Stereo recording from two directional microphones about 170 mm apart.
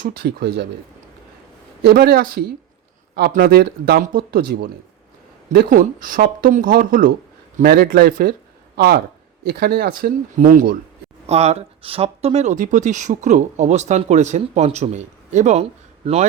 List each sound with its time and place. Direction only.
0.0 s speech: 65° right (ahead or behind)
1.8 s a man's voice: 65° right (ahead or behind)
11.3 s speech: 40° right (ahead or behind)